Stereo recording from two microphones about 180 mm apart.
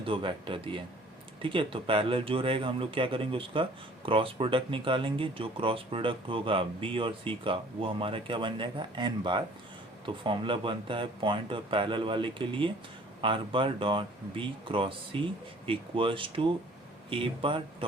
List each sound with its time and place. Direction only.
0.0 s speech: 30° right (ahead or behind)